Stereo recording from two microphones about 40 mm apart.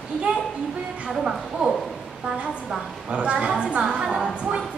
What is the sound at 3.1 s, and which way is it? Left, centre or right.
Speech, right.